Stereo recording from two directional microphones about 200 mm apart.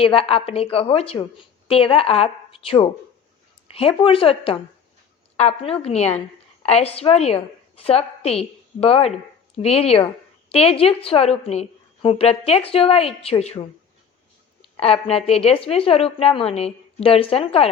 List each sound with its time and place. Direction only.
0.0 s a woman's voice: 30° left (ahead or behind)
14.8 s a woman's voice: 30° left (ahead or behind)